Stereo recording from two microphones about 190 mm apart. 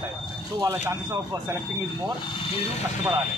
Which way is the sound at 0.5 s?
15° right (ahead or behind).